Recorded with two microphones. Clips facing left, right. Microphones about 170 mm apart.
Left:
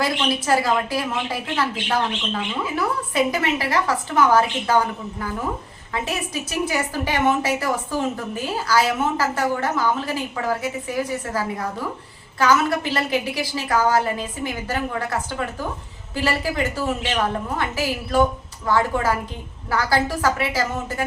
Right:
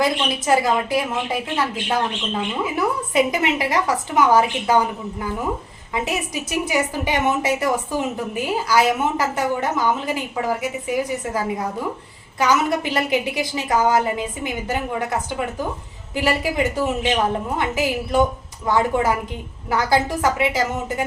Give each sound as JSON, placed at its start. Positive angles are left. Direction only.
{"t": 0.0, "sound": "a woman's voice", "side_deg": -20}